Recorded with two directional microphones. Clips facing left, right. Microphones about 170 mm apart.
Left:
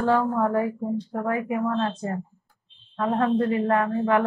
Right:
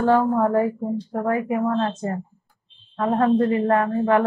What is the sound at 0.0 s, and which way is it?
Speech, 40° right (ahead or behind).